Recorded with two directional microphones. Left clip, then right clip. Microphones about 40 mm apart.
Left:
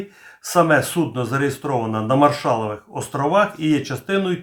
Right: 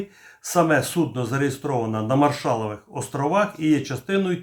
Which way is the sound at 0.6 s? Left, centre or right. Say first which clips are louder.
Left 3 dB; centre.